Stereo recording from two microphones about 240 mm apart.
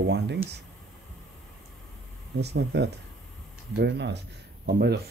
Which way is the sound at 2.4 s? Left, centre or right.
Right.